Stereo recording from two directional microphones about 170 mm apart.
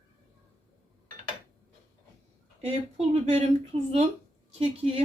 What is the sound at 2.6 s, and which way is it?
Speech, 40° right (ahead or behind).